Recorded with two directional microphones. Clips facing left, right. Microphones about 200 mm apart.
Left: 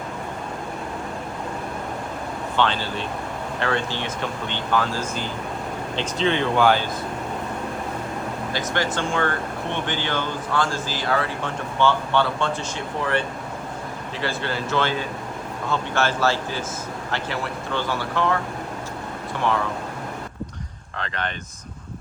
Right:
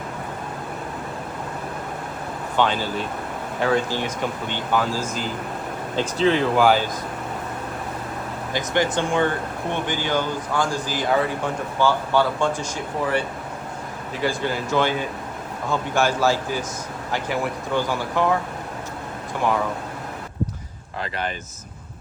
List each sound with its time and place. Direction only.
2.6 s speech: 10° right (ahead or behind)
8.5 s speech: 15° right (ahead or behind)
14.2 s speech: 15° right (ahead or behind)
21.0 s speech: 5° right (ahead or behind)